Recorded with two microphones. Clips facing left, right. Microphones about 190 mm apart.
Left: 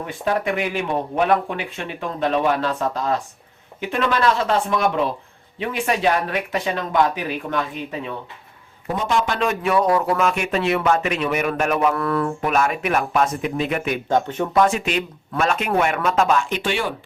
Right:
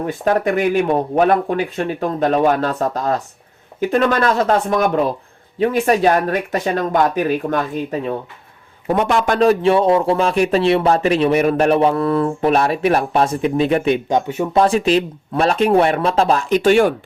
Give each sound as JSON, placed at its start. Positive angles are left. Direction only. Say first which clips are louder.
{"t": 0.0, "sound": "speech", "louder": "right 5 dB", "side_deg": -45}
{"t": 8.9, "sound": "a man's voice", "louder": "right 5 dB", "side_deg": -60}
{"t": 9.4, "sound": "speech", "louder": "right 7 dB", "side_deg": -30}
{"t": 14.1, "sound": "speech", "louder": "right 2 dB", "side_deg": -15}
{"t": 14.5, "sound": "speech", "louder": "right 5 dB", "side_deg": -35}